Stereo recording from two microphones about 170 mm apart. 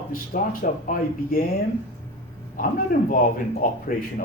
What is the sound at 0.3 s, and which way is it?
Speech, 60° left (ahead or behind).